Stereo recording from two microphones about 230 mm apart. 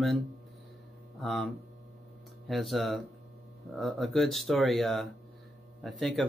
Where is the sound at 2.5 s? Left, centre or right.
Centre.